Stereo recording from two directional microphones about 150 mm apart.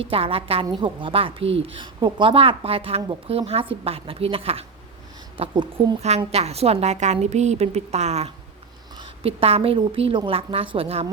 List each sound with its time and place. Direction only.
0.0 s speech: 40° right (ahead or behind)
6.0 s a woman's voice: 45° right (ahead or behind)